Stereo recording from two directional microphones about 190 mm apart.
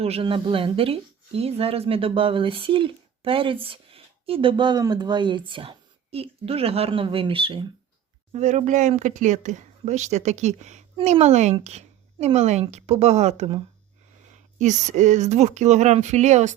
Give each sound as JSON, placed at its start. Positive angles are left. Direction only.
{"t": 0.0, "sound": "a woman's voice", "side_deg": -30}